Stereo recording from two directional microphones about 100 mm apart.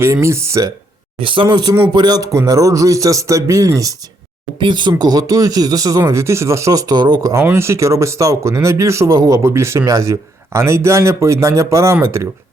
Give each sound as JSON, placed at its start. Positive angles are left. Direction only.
{"t": 0.0, "sound": "speech", "side_deg": -30}
{"t": 1.2, "sound": "speech", "side_deg": -60}
{"t": 4.6, "sound": "speech", "side_deg": -50}